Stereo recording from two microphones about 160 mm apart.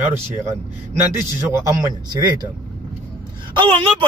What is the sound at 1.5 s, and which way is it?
Speech, 20° right (ahead or behind).